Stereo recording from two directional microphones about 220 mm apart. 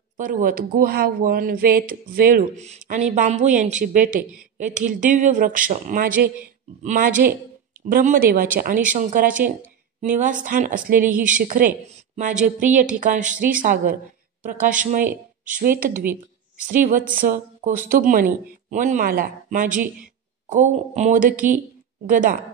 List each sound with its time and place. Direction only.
0.2 s speech: 40° right (ahead or behind)